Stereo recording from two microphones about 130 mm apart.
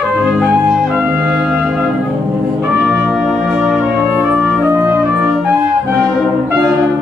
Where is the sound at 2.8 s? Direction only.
5° left (ahead or behind); by 5.3 s 15° right (ahead or behind).